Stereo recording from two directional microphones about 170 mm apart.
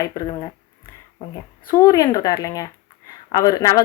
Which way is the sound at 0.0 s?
20° left (ahead or behind).